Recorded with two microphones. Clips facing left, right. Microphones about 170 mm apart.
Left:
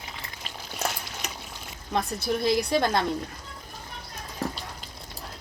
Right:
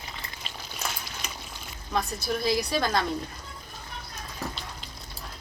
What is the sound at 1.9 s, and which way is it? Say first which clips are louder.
Speech: left 2 dB; 25° left (ahead or behind).